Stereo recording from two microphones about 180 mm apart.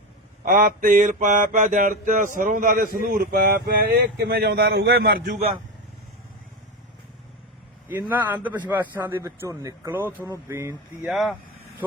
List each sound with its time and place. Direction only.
0.4 s mantra: 50° right (ahead or behind)
7.9 s a man's voice: 10° right (ahead or behind)
11.0 s speech: centre (ahead or behind)